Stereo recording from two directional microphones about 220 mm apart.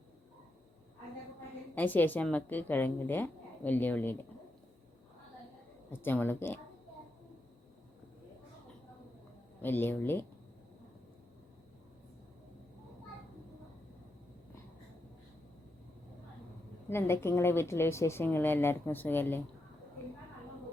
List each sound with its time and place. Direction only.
1.7 s a woman's voice: 10° left (ahead or behind)
5.9 s a woman's voice: 10° left (ahead or behind)
9.6 s a woman's voice: 10° left (ahead or behind)
16.9 s a woman's voice: 10° left (ahead or behind)